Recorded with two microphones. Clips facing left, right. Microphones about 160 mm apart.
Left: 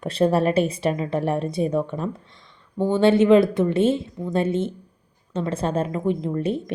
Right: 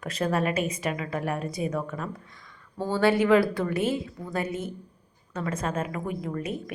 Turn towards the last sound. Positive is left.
turn(degrees=30)  # may be behind; listen again after turning